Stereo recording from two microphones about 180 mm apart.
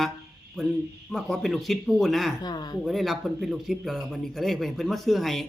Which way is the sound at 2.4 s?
25° left (ahead or behind).